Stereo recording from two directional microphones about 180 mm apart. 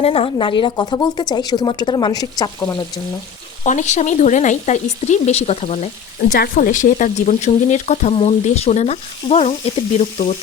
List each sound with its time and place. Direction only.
0.0 s speech: 35° left (ahead or behind)
3.6 s speech: 40° left (ahead or behind)
6.2 s speech: 55° left (ahead or behind); by 10.3 s 35° left (ahead or behind)